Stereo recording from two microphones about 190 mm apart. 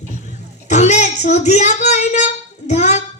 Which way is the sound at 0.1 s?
40° left (ahead or behind).